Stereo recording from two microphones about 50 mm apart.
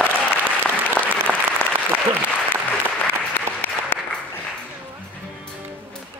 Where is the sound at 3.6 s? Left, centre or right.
Left.